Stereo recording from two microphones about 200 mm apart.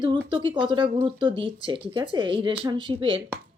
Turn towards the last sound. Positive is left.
turn(degrees=-25)  # may be behind; listen again after turning